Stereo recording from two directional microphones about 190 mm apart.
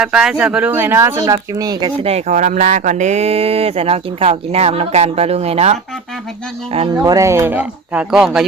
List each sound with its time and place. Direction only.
0.0 s speech: 5° right (ahead or behind); by 1.9 s 20° right (ahead or behind)
2.0 s speech: 35° right (ahead or behind)
7.0 s speech: 15° right (ahead or behind)